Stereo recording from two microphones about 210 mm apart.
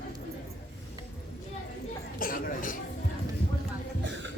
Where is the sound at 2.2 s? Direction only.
40° left (ahead or behind).